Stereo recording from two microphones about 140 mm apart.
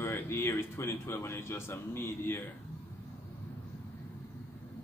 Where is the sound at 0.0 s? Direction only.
15° left (ahead or behind).